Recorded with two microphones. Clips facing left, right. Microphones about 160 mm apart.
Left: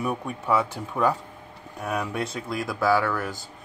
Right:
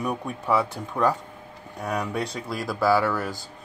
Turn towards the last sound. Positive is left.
turn(degrees=-5)  # may be behind; listen again after turning